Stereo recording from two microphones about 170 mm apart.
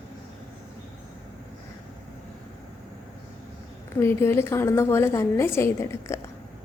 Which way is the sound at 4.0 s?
15° left (ahead or behind).